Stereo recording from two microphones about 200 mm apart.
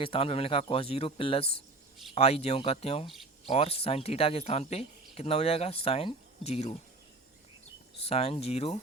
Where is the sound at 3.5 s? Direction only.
30° left (ahead or behind).